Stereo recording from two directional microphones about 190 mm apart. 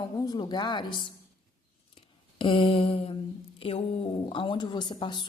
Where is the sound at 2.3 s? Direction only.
30° left (ahead or behind).